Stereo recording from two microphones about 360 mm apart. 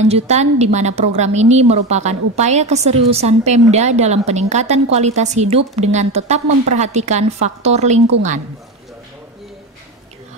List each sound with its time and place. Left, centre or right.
0.1 s a woman's voice: centre